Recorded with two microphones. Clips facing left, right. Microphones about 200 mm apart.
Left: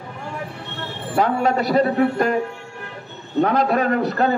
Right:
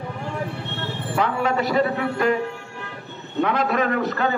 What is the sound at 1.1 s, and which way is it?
A man's voice, 40° left (ahead or behind).